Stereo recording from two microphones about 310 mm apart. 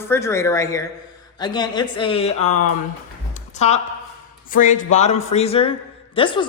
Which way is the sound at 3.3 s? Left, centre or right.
Left.